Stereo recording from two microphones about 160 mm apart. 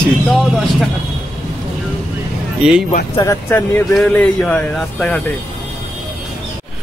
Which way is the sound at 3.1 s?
20° left (ahead or behind).